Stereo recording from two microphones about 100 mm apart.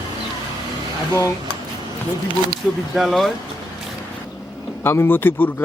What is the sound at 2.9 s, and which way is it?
Speech, centre (ahead or behind).